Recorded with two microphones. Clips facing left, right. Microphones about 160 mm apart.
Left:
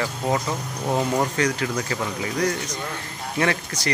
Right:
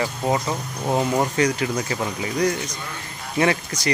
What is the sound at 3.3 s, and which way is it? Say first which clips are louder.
Speech: right 3 dB; 20° right (ahead or behind).